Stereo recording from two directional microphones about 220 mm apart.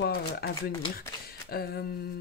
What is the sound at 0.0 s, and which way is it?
Speech, 45° left (ahead or behind).